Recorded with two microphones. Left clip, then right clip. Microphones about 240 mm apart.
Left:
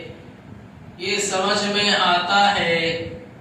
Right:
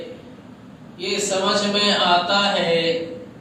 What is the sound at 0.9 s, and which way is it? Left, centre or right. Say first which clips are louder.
Speech: even; left.